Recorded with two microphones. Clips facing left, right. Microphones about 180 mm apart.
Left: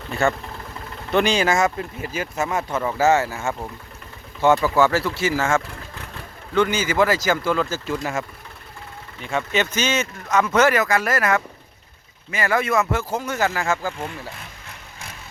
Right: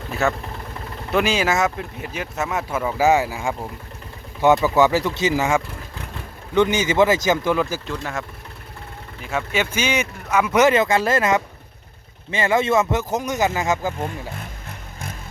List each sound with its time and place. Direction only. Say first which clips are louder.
0.1 s speech: left 1 dB; 5° right (ahead or behind)
7.9 s speech: left 3 dB; 5° left (ahead or behind)
9.2 s speech: left 1 dB; 5° right (ahead or behind)
10.8 s speech: right 3 dB; 25° right (ahead or behind)
13.9 s speech: right 3 dB; 45° right (ahead or behind)